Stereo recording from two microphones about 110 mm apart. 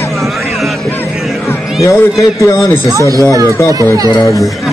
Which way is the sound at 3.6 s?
25° left (ahead or behind).